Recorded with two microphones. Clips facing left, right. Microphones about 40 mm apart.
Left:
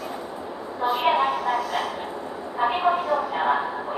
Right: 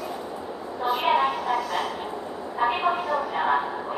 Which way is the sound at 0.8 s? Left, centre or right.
Centre.